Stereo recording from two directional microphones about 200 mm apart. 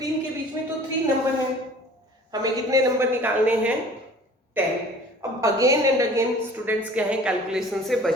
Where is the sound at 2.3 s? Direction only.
20° right (ahead or behind).